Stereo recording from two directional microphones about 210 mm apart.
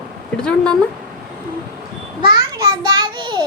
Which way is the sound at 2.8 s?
20° right (ahead or behind).